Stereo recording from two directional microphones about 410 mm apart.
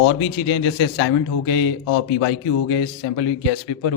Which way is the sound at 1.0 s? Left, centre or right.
Left.